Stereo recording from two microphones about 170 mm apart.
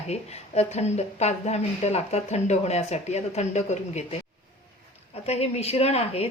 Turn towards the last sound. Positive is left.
turn(degrees=40)  # may be behind; listen again after turning